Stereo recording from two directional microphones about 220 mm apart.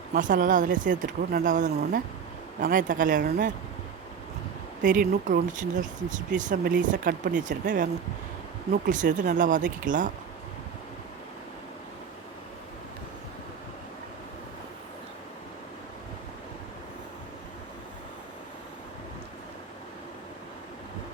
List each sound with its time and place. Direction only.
0.1 s speech: 40° right (ahead or behind)
4.8 s speech: 35° right (ahead or behind)
8.9 s speech: 35° right (ahead or behind)